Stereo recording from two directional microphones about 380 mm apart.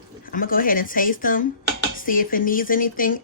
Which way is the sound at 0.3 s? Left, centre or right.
Left.